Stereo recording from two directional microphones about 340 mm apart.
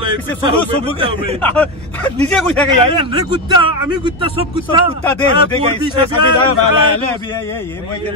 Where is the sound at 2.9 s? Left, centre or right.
Centre.